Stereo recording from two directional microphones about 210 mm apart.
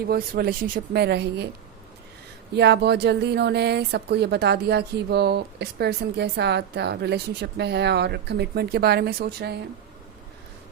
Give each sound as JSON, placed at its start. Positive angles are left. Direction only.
{"t": 0.1, "sound": "speech", "side_deg": -45}
{"t": 2.6, "sound": "speech", "side_deg": -50}